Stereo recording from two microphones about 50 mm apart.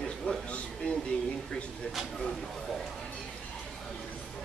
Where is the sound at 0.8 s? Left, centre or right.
Left.